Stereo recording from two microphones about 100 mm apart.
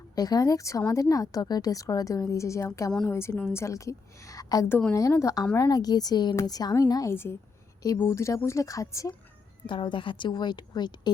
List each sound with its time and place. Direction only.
0.2 s a woman's voice: 40° left (ahead or behind)
7.1 s a woman's voice: 25° left (ahead or behind)
9.6 s a woman's voice: 55° left (ahead or behind)